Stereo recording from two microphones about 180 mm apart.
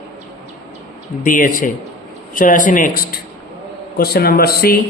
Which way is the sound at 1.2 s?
50° left (ahead or behind).